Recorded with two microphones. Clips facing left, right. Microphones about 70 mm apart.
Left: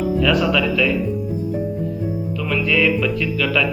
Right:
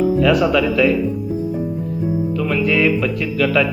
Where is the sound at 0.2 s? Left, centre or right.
Centre.